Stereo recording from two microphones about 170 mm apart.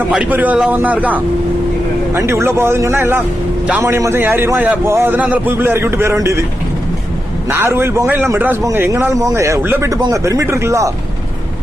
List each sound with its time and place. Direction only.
0.1 s a man's voice: 10° right (ahead or behind)
7.5 s a man's voice: 15° right (ahead or behind)